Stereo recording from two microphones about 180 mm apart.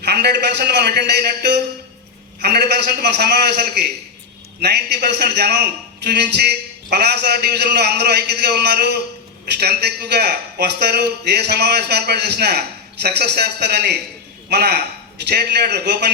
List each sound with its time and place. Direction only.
0.0 s a man's voice: 65° right (ahead or behind)